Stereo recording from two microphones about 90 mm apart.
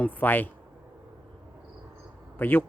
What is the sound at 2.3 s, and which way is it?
Speech, 20° left (ahead or behind).